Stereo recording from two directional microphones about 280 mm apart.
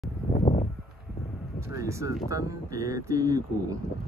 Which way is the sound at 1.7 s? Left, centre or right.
Centre.